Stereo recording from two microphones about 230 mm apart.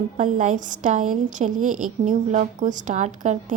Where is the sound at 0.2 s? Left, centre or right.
Right.